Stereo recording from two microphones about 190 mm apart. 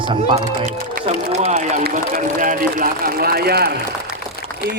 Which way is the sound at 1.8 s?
50° right (ahead or behind).